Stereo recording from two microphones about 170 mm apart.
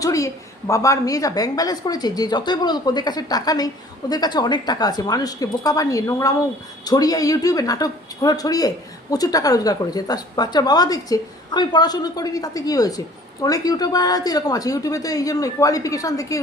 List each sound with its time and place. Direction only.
0.0 s speech: 20° left (ahead or behind)